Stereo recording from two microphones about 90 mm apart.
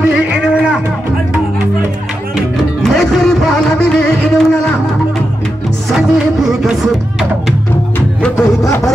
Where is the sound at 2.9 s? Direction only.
5° left (ahead or behind).